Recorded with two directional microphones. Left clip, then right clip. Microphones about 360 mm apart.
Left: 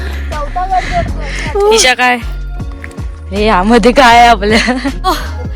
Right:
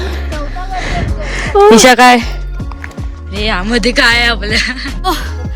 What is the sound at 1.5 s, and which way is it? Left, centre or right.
Speech, right.